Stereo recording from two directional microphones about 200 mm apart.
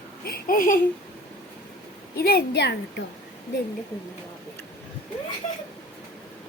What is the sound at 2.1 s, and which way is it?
Speech, 50° left (ahead or behind).